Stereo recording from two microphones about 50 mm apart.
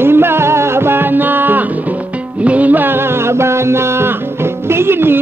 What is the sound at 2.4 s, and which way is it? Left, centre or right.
Music, right.